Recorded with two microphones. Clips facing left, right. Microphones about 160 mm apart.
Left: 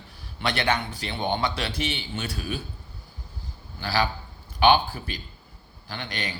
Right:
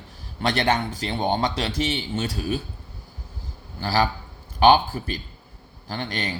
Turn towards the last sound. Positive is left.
turn(degrees=-40)  # may be behind; listen again after turning